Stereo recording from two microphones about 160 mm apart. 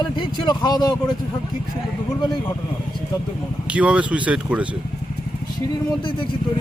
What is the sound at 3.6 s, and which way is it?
Speech, 5° right (ahead or behind).